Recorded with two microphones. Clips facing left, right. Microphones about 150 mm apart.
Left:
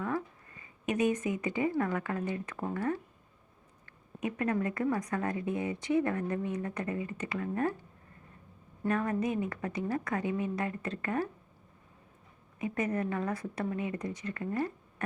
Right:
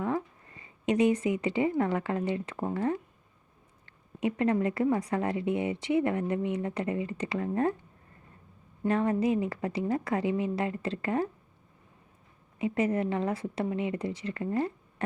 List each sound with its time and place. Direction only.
0.6 s a sound: 30° right (ahead or behind)
1.4 s speech: 30° right (ahead or behind)
8.9 s speech: 30° right (ahead or behind)
12.5 s speech: 30° right (ahead or behind)